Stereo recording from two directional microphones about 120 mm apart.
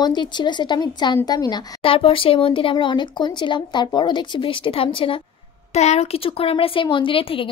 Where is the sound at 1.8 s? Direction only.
50° left (ahead or behind).